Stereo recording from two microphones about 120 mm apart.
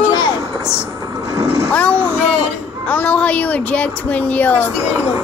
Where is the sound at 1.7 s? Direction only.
15° left (ahead or behind).